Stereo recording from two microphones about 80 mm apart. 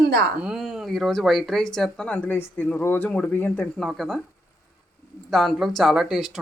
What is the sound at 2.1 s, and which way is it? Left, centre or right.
Speech, left.